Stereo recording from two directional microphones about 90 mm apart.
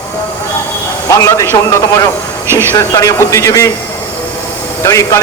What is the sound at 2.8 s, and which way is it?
Speech, 35° left (ahead or behind).